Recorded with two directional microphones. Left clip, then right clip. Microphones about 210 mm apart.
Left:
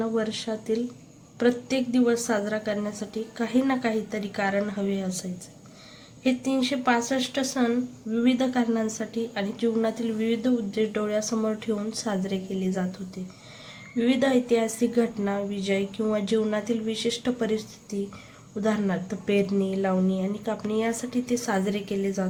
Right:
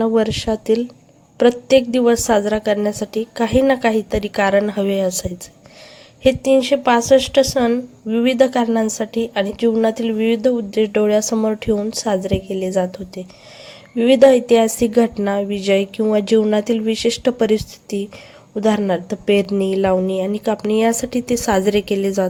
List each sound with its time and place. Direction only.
0.0 s a woman's voice: 40° right (ahead or behind)
6.2 s a woman's voice: 40° right (ahead or behind)